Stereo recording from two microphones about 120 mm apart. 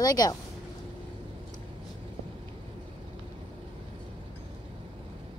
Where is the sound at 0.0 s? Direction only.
30° left (ahead or behind).